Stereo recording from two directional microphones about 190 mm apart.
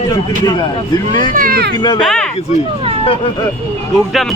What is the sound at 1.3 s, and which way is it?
Speech, 50° right (ahead or behind).